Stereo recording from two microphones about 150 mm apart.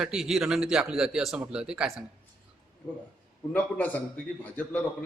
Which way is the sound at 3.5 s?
10° left (ahead or behind).